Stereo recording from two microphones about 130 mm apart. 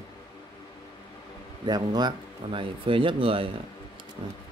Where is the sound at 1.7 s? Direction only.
35° right (ahead or behind).